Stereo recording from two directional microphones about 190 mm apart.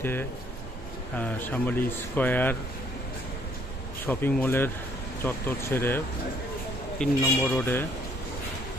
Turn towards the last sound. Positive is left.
turn(degrees=10)  # may be behind; listen again after turning